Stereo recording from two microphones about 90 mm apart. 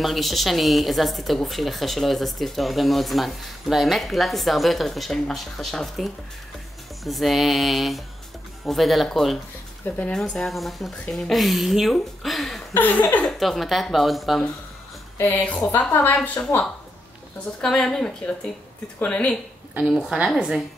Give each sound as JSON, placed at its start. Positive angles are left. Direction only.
{"t": 0.0, "sound": "speech", "side_deg": 0}
{"t": 9.8, "sound": "a woman's voice", "side_deg": 15}
{"t": 10.1, "sound": "speech", "side_deg": 5}
{"t": 12.7, "sound": "a sound", "side_deg": 20}
{"t": 13.2, "sound": "speech", "side_deg": 5}
{"t": 15.1, "sound": "speech", "side_deg": 25}
{"t": 15.4, "sound": "a woman's voice", "side_deg": 10}
{"t": 15.9, "sound": "a sound", "side_deg": 20}
{"t": 17.6, "sound": "a woman's voice", "side_deg": 10}
{"t": 19.9, "sound": "a woman's voice", "side_deg": -5}